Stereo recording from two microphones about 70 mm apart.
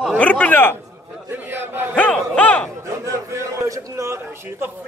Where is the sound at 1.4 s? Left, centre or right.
Right.